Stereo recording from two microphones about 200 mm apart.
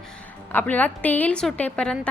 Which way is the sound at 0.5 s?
10° left (ahead or behind).